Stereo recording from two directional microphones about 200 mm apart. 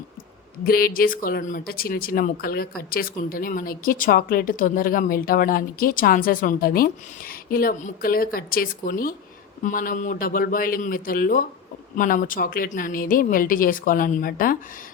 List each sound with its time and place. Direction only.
0.6 s speech: 45° left (ahead or behind)